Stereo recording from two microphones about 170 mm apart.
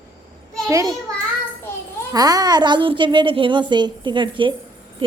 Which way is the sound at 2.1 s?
20° right (ahead or behind).